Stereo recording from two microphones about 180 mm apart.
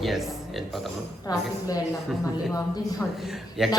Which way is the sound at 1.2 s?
20° left (ahead or behind).